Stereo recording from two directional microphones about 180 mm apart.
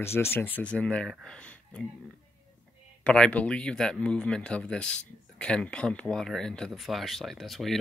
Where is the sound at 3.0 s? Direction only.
5° left (ahead or behind).